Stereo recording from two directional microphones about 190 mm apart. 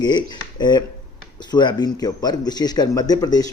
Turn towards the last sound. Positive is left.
turn(degrees=20)  # may be behind; listen again after turning